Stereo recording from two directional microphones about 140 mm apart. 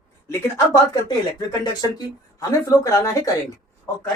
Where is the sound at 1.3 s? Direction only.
30° left (ahead or behind).